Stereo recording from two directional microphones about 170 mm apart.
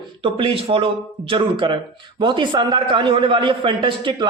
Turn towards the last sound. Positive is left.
turn(degrees=-30)  # may be behind; listen again after turning